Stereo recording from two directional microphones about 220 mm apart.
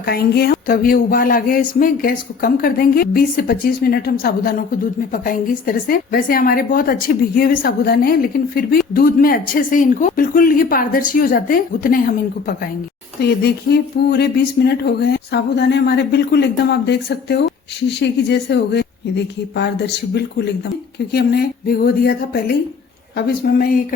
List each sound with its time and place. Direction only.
0.0 s speech: 45° left (ahead or behind)